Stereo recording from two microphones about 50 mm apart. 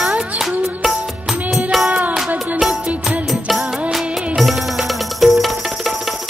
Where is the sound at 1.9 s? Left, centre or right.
Right.